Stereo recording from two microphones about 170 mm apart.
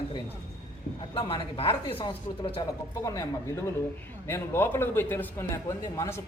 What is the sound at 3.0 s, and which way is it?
Speech, 20° left (ahead or behind).